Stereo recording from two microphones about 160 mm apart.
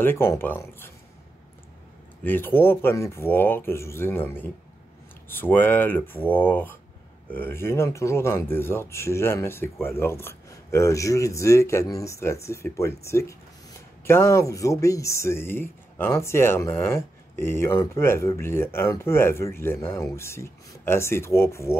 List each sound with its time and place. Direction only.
0.0 s speech: 15° left (ahead or behind)
2.2 s speech: 15° left (ahead or behind)